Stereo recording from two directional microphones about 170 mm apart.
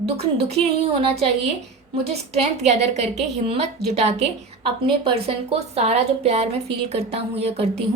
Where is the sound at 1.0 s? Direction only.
40° right (ahead or behind).